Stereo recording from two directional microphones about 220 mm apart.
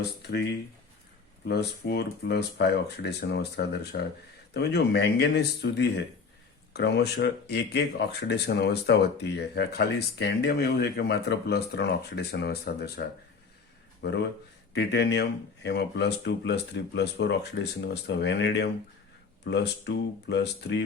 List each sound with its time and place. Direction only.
0.2 s speech: 50° left (ahead or behind)
1.5 s speech: 50° left (ahead or behind)